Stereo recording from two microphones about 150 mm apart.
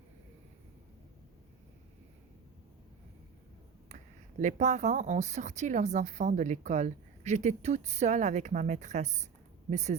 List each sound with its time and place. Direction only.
3.8 s speech: 55° right (ahead or behind)